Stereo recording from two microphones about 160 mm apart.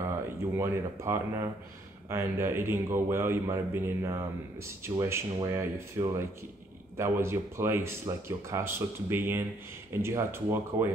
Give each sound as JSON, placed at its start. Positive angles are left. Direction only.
{"t": 0.6, "sound": "speech", "side_deg": -15}